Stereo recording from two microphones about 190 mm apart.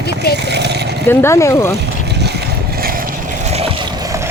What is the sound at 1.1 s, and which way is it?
Speech, 15° left (ahead or behind).